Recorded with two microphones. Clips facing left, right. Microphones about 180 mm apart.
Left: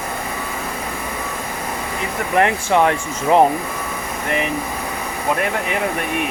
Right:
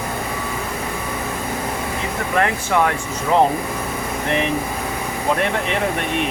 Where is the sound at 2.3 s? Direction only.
20° left (ahead or behind).